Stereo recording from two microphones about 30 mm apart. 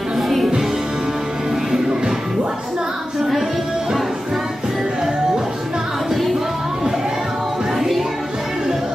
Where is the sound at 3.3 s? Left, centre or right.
Centre.